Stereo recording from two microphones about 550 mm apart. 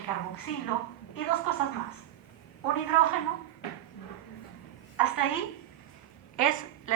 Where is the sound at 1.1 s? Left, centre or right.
Left.